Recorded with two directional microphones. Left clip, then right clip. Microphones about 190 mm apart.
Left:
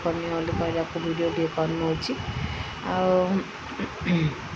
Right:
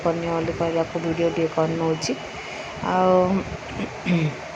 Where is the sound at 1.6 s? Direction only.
20° right (ahead or behind).